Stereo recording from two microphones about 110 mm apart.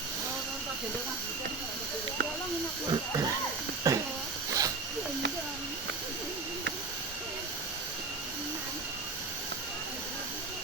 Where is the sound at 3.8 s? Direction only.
30° right (ahead or behind).